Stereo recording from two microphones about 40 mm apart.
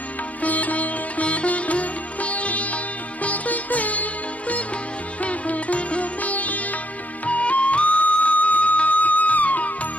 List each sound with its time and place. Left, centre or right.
0.4 s sitar: left
7.3 s music: left